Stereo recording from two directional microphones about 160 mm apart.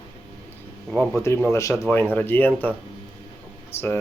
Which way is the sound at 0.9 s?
5° left (ahead or behind).